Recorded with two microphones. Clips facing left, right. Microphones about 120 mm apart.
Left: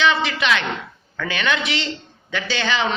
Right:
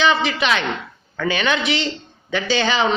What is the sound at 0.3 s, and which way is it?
A man's voice, 35° right (ahead or behind).